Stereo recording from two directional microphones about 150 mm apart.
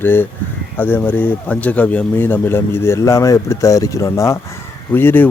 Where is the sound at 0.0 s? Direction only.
15° left (ahead or behind).